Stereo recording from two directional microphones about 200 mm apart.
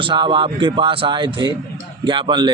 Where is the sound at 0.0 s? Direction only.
25° right (ahead or behind).